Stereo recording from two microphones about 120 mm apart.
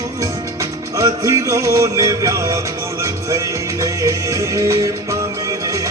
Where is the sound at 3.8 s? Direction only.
25° right (ahead or behind).